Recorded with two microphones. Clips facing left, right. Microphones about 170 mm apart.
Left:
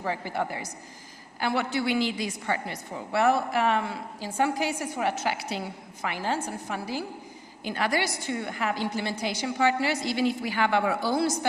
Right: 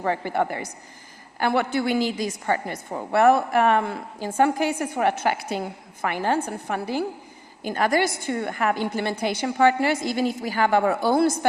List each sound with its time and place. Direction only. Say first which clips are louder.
0.0 s a woman's voice: right 6 dB; 55° right (ahead or behind)
7.6 s a woman's voice: right 6 dB; 45° right (ahead or behind)